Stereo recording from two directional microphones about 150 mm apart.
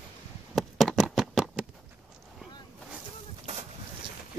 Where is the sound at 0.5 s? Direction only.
Centre (ahead or behind).